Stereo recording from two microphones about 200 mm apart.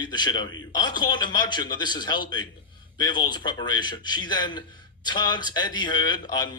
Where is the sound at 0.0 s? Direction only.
20° left (ahead or behind).